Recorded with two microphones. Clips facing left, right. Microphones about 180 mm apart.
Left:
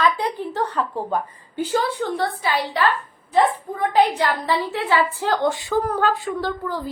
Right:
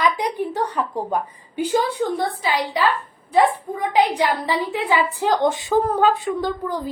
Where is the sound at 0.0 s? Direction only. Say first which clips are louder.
Even; 15° right (ahead or behind).